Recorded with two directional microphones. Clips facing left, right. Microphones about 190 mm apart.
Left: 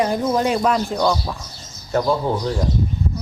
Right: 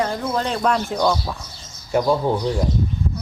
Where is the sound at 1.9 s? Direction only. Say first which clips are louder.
Right 1 dB; 15° right (ahead or behind).